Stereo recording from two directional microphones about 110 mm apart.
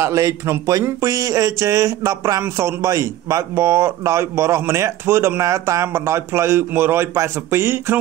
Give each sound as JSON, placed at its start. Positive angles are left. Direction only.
{"t": 0.0, "sound": "speech", "side_deg": -30}